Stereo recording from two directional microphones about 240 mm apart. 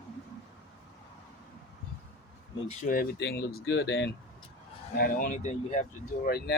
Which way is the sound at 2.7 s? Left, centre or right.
Left.